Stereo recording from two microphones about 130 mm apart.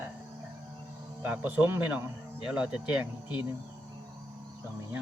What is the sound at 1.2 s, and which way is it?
Speech, 15° right (ahead or behind).